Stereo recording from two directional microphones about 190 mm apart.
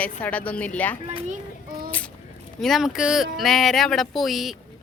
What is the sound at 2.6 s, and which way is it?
Speech, centre (ahead or behind).